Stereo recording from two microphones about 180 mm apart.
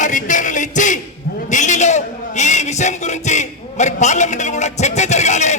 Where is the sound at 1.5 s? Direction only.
40° left (ahead or behind).